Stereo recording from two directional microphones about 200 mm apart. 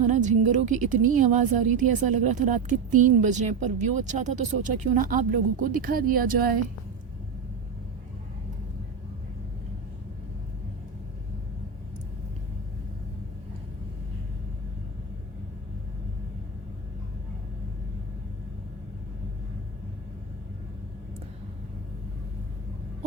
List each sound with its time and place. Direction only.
0.1 s a woman's voice: 35° right (ahead or behind)